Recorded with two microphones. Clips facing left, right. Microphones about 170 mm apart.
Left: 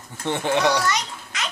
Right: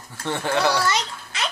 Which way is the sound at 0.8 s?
30° right (ahead or behind).